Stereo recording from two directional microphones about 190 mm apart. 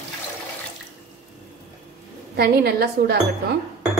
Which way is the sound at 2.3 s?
55° right (ahead or behind).